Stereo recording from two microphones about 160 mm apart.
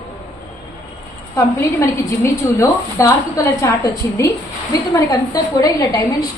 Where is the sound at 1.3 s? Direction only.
15° left (ahead or behind).